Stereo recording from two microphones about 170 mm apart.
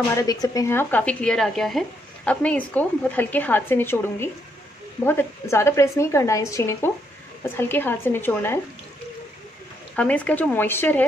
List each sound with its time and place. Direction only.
0.1 s speech: 20° left (ahead or behind)
9.9 s speech: 10° left (ahead or behind)